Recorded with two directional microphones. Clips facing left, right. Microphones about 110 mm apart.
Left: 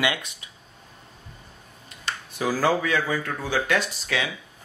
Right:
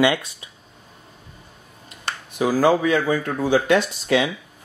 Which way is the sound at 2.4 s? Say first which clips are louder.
Right 5 dB; 15° right (ahead or behind).